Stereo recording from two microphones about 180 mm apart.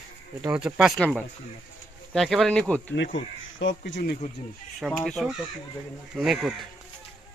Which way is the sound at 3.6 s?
80° left.